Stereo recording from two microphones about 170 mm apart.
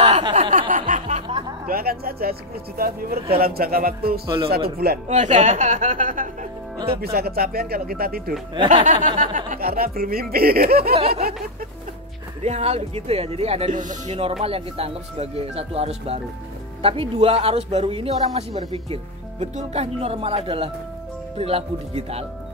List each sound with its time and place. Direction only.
0.0 s chuckle: 35° right (ahead or behind)
0.5 s a sound: 50° right (ahead or behind)
1.7 s speech: 60° right (ahead or behind)
5.0 s a woman's voice: 45° right (ahead or behind)
7.0 s speech: 65° right (ahead or behind)
8.6 s speech: 45° right (ahead or behind); by 11.0 s 65° right (ahead or behind)
11.0 s speech: 35° right (ahead or behind)
12.4 s speech: 40° right (ahead or behind)
14.4 s speech: 35° right (ahead or behind)